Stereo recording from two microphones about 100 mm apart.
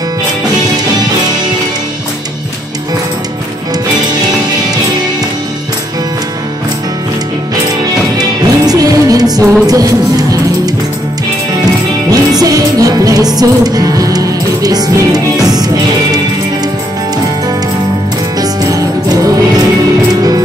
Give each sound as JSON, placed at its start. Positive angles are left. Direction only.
{"t": 8.2, "sound": "music", "side_deg": -40}
{"t": 12.1, "sound": "music", "side_deg": -35}
{"t": 18.4, "sound": "music", "side_deg": -40}